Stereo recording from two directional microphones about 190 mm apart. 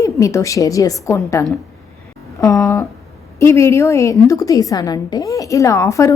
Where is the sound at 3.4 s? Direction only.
15° left (ahead or behind).